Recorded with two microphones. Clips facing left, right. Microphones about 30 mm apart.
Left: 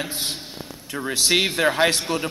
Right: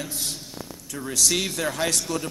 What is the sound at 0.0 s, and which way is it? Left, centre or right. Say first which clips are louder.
Speech: left 4 dB; left.